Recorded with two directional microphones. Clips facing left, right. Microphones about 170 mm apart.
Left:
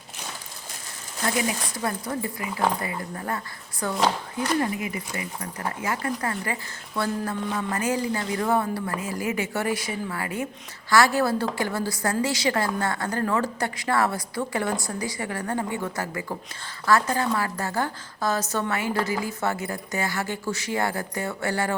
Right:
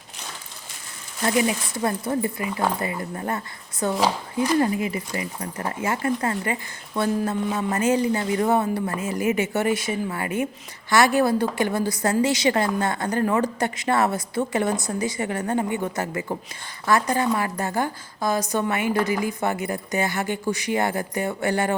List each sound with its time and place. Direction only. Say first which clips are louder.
1.7 s a woman's voice: right 4 dB; 25° right (ahead or behind)